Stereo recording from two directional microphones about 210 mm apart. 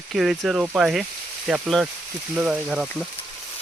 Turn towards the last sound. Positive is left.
turn(degrees=-5)  # may be behind; listen again after turning